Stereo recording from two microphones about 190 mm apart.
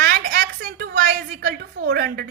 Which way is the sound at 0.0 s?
55° right (ahead or behind).